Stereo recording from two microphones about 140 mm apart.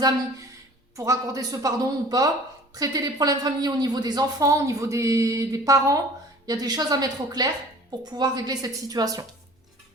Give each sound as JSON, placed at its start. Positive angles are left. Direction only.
{"t": 0.9, "sound": "speech", "side_deg": -25}